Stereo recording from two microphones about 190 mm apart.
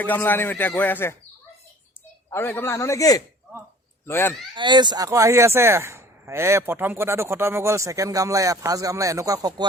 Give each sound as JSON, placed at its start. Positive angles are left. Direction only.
{"t": 0.0, "sound": "speech", "side_deg": 10}
{"t": 2.3, "sound": "speech", "side_deg": 10}
{"t": 4.5, "sound": "speech", "side_deg": -25}